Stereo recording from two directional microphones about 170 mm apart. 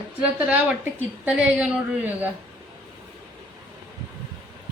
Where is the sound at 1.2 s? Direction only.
5° right (ahead or behind).